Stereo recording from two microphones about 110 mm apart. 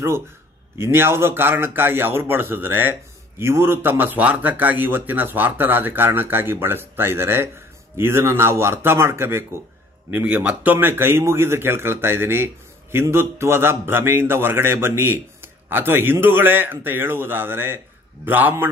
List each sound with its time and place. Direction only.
0.7 s a man's voice: 20° right (ahead or behind)